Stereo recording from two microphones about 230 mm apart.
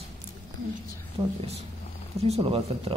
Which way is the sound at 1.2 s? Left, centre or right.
Centre.